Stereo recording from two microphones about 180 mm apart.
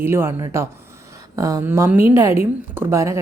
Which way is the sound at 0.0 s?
15° right (ahead or behind).